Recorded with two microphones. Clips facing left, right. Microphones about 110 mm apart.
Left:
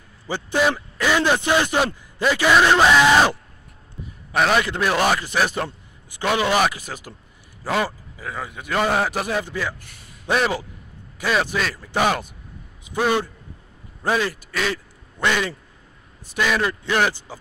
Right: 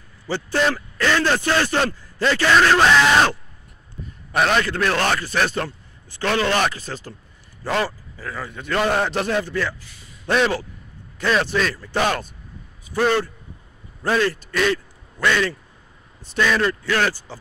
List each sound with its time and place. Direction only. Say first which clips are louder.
0.3 s a man's voice: even; 10° left (ahead or behind)
15.1 s a man's voice: right 2 dB; 15° left (ahead or behind)